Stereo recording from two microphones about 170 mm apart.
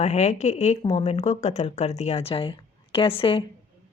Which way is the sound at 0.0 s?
40° left (ahead or behind).